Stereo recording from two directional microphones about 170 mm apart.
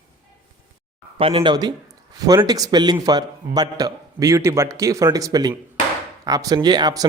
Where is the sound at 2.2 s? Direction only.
20° right (ahead or behind).